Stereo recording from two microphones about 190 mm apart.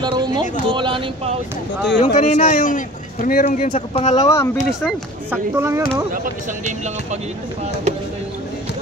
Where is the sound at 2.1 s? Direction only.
40° left (ahead or behind).